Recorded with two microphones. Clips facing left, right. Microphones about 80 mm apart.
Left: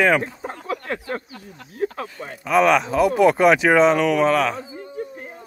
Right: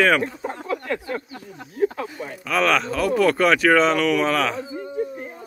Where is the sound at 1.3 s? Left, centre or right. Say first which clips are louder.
Right 2 dB; right.